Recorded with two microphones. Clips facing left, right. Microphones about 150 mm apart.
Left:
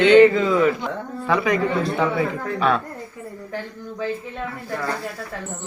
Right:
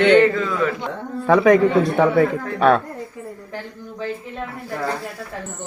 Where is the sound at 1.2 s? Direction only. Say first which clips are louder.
Right 7 dB; 50° right (ahead or behind).